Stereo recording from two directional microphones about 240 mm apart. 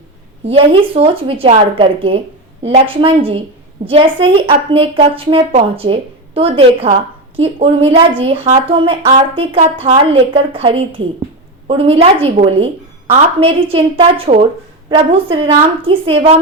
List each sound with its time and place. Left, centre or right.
0.4 s speech: right